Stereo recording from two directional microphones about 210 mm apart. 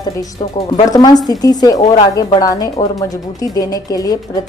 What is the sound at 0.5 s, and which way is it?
Speech, 25° left (ahead or behind).